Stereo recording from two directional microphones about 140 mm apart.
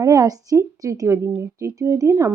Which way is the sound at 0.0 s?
25° right (ahead or behind).